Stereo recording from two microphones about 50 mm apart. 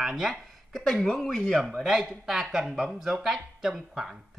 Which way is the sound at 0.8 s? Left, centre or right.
Centre.